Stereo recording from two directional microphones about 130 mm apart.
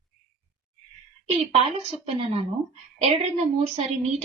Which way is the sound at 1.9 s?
50° right (ahead or behind).